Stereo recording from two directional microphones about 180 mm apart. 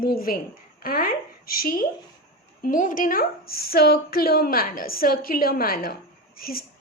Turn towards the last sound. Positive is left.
turn(degrees=55)  # may be behind; listen again after turning